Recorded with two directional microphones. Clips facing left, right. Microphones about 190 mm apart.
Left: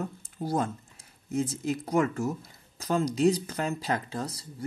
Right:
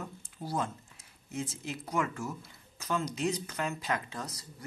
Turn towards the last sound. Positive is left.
turn(degrees=30)  # may be behind; listen again after turning